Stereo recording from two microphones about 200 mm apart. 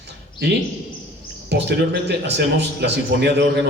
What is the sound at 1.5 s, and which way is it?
A man's voice, 60° right (ahead or behind).